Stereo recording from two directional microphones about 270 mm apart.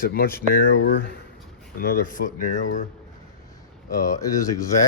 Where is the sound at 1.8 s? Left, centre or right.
Left.